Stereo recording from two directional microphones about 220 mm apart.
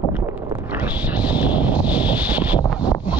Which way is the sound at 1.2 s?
5° right (ahead or behind).